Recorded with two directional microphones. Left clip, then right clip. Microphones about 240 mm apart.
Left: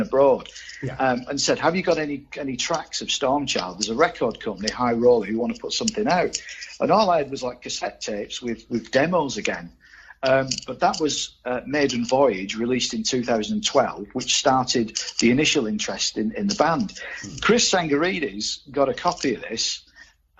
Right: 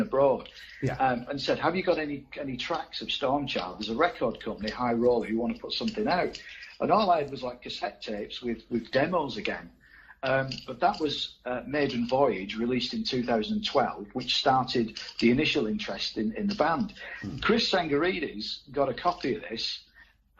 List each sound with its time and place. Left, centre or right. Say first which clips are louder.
0.0 s speech: left 6 dB; left